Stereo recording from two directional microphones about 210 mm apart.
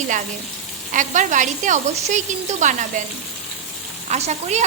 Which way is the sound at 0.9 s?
35° right (ahead or behind).